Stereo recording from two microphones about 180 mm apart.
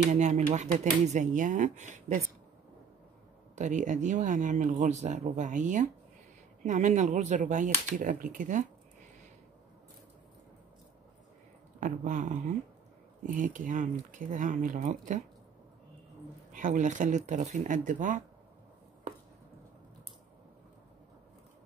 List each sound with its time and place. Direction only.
0.1 s speech: 40° right (ahead or behind)
3.5 s speech: 45° right (ahead or behind)
11.8 s speech: 45° right (ahead or behind)
16.5 s speech: 45° right (ahead or behind)